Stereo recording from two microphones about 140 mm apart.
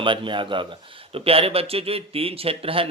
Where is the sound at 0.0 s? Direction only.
35° right (ahead or behind).